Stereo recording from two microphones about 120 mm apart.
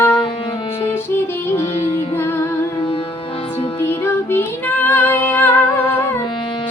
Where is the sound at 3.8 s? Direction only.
20° left (ahead or behind).